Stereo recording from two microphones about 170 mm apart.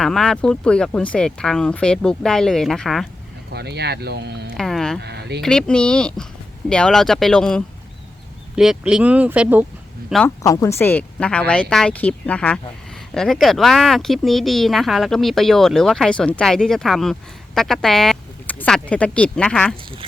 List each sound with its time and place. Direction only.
0.0 s speech: centre (ahead or behind)
3.5 s speech: 75° right (ahead or behind)
4.5 s a sound: centre (ahead or behind)
4.9 s speech: 75° right (ahead or behind)
5.4 s speech: 5° left (ahead or behind)
10.2 s a woman's voice: 20° left (ahead or behind)